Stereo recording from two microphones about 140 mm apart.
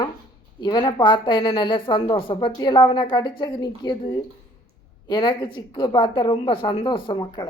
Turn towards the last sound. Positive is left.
turn(degrees=35)  # may be behind; listen again after turning